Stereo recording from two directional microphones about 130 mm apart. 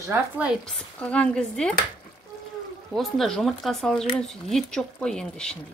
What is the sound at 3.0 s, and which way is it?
Speech, 5° left (ahead or behind).